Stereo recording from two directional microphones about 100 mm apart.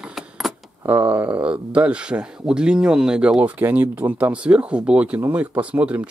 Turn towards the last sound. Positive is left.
turn(degrees=-15)  # may be behind; listen again after turning